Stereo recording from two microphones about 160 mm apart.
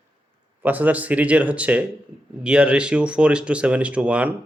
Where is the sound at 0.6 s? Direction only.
10° right (ahead or behind).